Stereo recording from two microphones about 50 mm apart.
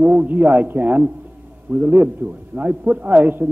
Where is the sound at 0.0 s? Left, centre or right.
Right.